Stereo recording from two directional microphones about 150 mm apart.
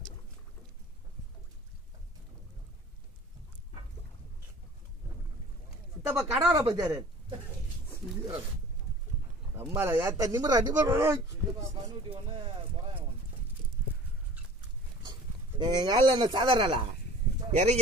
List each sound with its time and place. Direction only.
6.0 s speech: 15° right (ahead or behind)
9.8 s speech: 20° right (ahead or behind)
12.1 s speech: 35° right (ahead or behind)
15.0 s speech: 30° right (ahead or behind)
17.5 s speech: 45° right (ahead or behind)